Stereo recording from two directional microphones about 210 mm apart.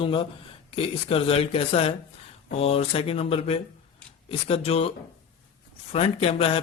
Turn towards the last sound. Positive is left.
turn(degrees=25)  # may be behind; listen again after turning